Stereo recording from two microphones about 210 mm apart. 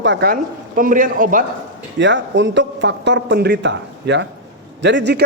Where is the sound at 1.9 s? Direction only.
60° right (ahead or behind).